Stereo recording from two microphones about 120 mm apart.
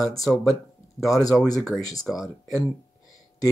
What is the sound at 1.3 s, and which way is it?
Speech, 5° left (ahead or behind).